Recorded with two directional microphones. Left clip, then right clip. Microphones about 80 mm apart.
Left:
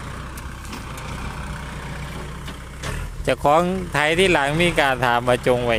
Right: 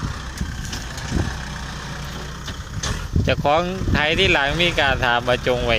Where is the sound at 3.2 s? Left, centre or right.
Left.